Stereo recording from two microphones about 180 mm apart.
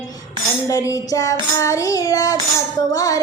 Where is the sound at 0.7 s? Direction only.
20° left (ahead or behind).